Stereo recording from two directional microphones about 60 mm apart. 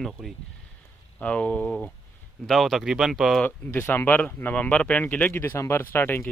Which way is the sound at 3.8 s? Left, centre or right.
Left.